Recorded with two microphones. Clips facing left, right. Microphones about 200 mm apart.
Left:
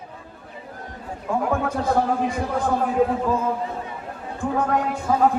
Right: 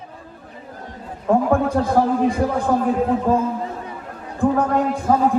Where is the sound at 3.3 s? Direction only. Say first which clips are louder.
Right 5 dB; 50° right (ahead or behind).